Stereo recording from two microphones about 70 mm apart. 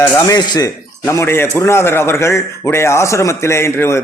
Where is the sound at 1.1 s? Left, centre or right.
Left.